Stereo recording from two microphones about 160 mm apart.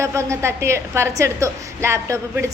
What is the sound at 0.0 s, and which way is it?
A woman's voice, 20° right (ahead or behind).